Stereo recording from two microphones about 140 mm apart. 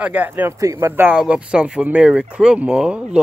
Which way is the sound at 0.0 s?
10° right (ahead or behind).